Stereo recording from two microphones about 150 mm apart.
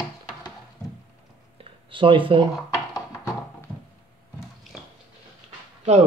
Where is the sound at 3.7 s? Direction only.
10° left (ahead or behind).